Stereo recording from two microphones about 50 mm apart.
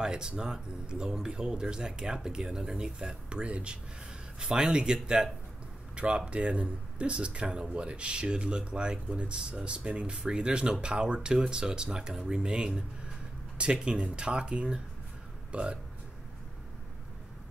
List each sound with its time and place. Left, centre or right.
0.0 s speech: centre